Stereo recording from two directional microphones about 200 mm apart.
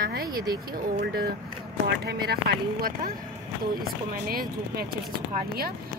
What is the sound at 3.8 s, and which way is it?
Speech, 45° right (ahead or behind).